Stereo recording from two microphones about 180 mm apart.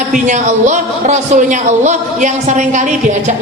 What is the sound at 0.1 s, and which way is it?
A woman's voice, 40° right (ahead or behind).